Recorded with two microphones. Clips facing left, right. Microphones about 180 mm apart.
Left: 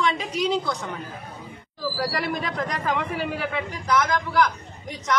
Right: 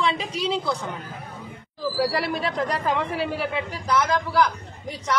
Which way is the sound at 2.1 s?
30° right (ahead or behind).